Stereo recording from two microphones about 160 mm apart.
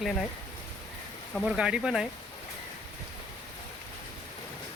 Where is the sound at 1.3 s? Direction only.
5° right (ahead or behind).